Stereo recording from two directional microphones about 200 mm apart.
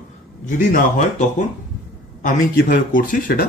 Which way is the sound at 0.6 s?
40° left (ahead or behind).